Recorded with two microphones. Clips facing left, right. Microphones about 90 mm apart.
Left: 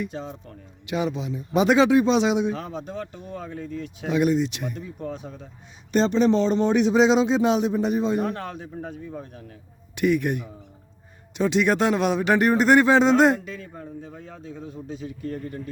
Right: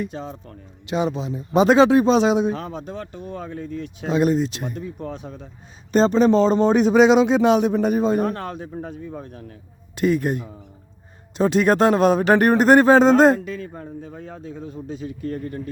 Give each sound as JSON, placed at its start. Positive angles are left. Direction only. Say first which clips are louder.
{"t": 0.1, "sound": "speech", "louder": "right 2 dB", "side_deg": -55}
{"t": 0.9, "sound": "speech", "louder": "right 3 dB", "side_deg": -30}
{"t": 4.0, "sound": "speech", "louder": "right 2 dB", "side_deg": -30}
{"t": 4.9, "sound": "speech", "louder": "right 1 dB", "side_deg": -65}
{"t": 5.9, "sound": "speech", "louder": "right 4 dB", "side_deg": -40}
{"t": 6.9, "sound": "speech", "louder": "right 5 dB", "side_deg": -60}
{"t": 9.9, "sound": "speech", "louder": "right 2 dB", "side_deg": -35}
{"t": 11.3, "sound": "speech", "louder": "right 4 dB", "side_deg": -40}
{"t": 13.4, "sound": "speech", "louder": "right 5 dB", "side_deg": -55}